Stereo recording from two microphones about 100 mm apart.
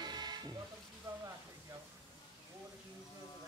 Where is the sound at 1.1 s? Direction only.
30° right (ahead or behind).